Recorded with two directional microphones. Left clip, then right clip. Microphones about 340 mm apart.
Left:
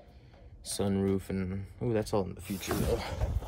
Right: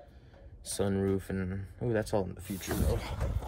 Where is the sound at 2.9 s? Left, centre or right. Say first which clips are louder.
Left 3 dB; left.